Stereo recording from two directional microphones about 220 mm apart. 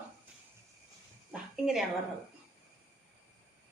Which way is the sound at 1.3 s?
Centre (ahead or behind).